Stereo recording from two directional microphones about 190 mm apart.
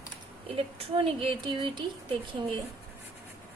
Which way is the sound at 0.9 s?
30° right (ahead or behind).